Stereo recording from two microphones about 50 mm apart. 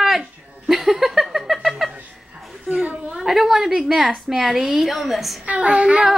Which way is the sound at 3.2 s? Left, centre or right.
Centre.